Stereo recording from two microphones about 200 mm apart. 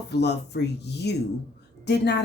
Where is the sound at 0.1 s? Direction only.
55° left (ahead or behind).